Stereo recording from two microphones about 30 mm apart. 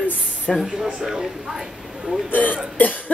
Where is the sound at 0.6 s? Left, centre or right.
Right.